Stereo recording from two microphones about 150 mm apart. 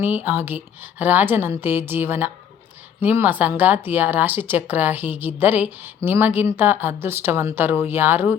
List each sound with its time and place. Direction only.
0.0 s speech: 10° right (ahead or behind)